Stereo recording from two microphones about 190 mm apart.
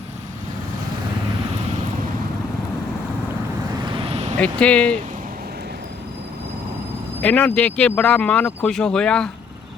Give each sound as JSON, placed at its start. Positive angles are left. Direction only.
{"t": 3.8, "sound": "vehicle", "side_deg": -30}
{"t": 4.4, "sound": "speech", "side_deg": 5}
{"t": 7.2, "sound": "speech", "side_deg": 5}